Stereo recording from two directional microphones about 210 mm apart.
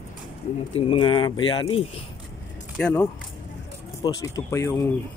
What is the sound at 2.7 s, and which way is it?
Speech, 5° left (ahead or behind).